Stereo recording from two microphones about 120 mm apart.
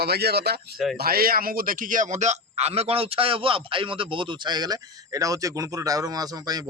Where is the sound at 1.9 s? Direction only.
85° right.